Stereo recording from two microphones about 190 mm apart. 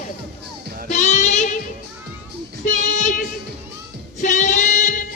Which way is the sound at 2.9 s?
40° left (ahead or behind).